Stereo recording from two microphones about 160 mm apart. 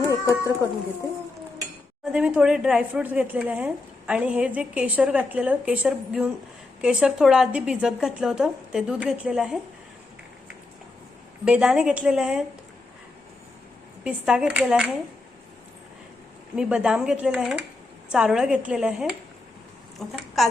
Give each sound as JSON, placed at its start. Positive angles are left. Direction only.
{"t": 0.1, "sound": "speech", "side_deg": 20}
{"t": 2.1, "sound": "a woman's voice", "side_deg": -5}
{"t": 11.4, "sound": "a woman's voice", "side_deg": -5}
{"t": 14.0, "sound": "a woman's voice", "side_deg": -5}
{"t": 16.6, "sound": "a woman's voice", "side_deg": -5}